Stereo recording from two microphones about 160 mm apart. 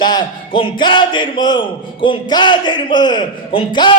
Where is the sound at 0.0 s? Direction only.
25° left (ahead or behind).